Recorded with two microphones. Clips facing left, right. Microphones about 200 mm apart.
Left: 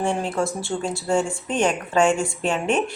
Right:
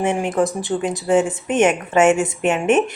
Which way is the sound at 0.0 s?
20° right (ahead or behind).